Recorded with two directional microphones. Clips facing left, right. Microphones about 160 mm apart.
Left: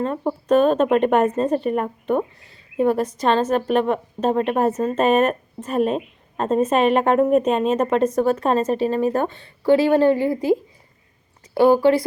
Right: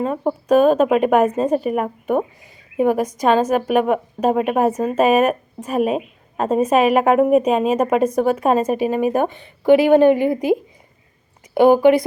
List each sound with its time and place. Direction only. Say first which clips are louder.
0.0 s speech: right 2 dB; 10° right (ahead or behind)